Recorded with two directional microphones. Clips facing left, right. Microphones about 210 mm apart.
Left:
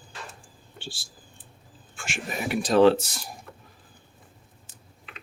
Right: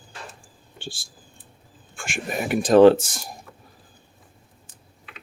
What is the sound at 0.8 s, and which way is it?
Speech, 50° right (ahead or behind).